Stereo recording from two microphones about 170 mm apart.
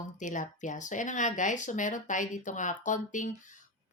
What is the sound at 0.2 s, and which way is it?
A woman's voice, 45° left (ahead or behind).